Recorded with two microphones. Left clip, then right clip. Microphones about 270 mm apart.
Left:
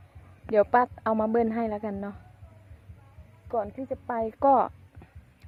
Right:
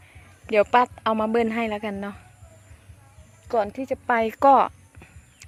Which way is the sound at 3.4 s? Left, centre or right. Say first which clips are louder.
Right 6 dB; right.